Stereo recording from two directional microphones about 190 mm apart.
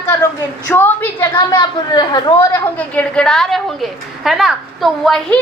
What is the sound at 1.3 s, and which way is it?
A woman's voice, 20° left (ahead or behind).